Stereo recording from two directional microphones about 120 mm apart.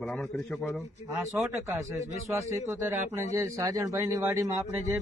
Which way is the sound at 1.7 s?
25° right (ahead or behind).